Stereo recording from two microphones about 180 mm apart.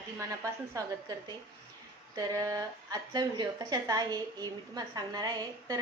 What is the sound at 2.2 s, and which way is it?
A woman's voice, 20° right (ahead or behind).